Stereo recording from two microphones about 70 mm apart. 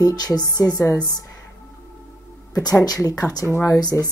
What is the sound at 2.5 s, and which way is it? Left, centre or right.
Speech, left.